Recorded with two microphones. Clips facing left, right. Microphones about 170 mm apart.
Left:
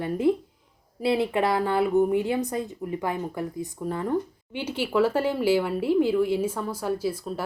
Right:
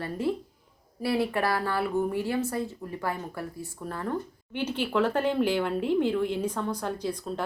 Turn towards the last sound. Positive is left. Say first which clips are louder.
# left 4 dB
turn(degrees=5)  # may be behind; listen again after turning